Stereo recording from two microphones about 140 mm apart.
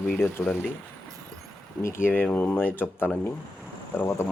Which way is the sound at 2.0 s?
15° left (ahead or behind).